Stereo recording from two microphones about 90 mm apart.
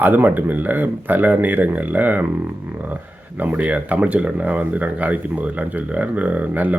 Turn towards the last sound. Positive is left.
turn(degrees=-20)  # may be behind; listen again after turning